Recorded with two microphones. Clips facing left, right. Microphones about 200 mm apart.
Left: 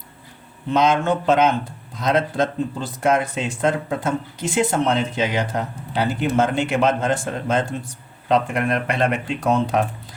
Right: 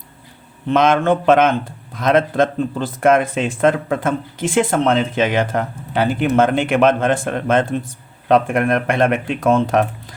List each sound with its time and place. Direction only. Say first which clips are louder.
0.7 s speech: right 4 dB; 55° right (ahead or behind)
4.4 s speech: right 4 dB; 90° right
4.8 s speech: right 4 dB; 55° right (ahead or behind)